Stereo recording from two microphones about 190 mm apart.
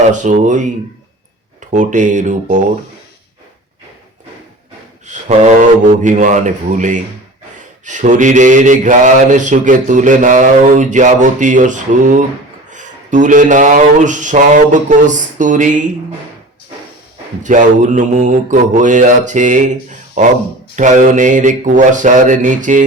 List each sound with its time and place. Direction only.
0.1 s mantra: 40° right (ahead or behind)
1.7 s mantra: 40° right (ahead or behind)
5.0 s mantra: 40° right (ahead or behind)
17.4 s mantra: 40° right (ahead or behind)
20.7 s mantra: 40° right (ahead or behind)